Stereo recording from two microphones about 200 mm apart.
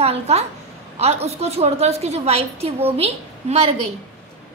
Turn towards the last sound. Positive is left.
turn(degrees=-30)  # may be behind; listen again after turning